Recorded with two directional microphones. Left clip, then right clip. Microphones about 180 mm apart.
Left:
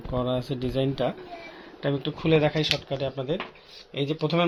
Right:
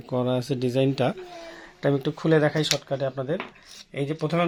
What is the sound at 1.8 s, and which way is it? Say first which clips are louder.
Speech: right 3 dB; 60° right (ahead or behind).